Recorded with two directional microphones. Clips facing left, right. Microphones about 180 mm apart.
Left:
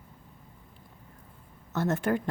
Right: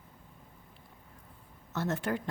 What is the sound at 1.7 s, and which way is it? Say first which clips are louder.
Speech: left 5 dB; 50° left (ahead or behind).